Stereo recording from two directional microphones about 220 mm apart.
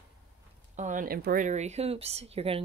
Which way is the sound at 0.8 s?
35° right (ahead or behind).